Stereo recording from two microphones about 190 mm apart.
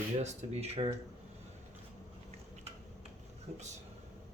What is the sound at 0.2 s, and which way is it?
Speech, 35° right (ahead or behind).